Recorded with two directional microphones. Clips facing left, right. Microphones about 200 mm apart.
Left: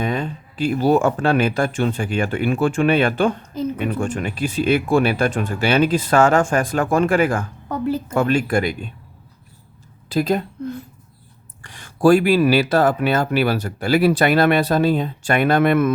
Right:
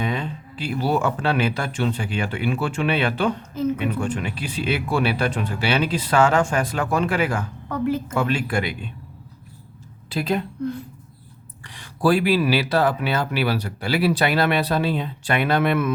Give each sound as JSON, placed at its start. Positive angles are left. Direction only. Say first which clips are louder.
{"t": 0.0, "sound": "speech", "louder": "left 3 dB", "side_deg": 50}
{"t": 7.7, "sound": "a woman's voice", "louder": "left 1 dB", "side_deg": 35}
{"t": 8.2, "sound": "speech", "louder": "left 9 dB", "side_deg": 45}
{"t": 10.1, "sound": "a woman's voice", "louder": "left 4 dB", "side_deg": 40}
{"t": 11.6, "sound": "speech", "louder": "left 5 dB", "side_deg": 45}